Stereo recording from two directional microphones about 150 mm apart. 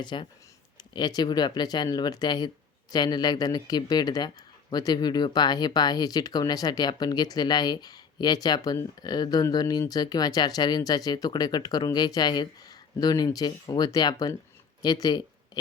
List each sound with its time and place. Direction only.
0.0 s speech: 30° left (ahead or behind)